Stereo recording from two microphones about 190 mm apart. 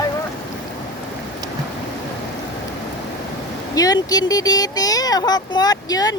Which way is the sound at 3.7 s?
20° left (ahead or behind).